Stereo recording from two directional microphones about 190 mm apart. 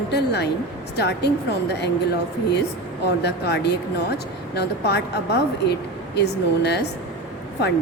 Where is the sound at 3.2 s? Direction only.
60° left (ahead or behind).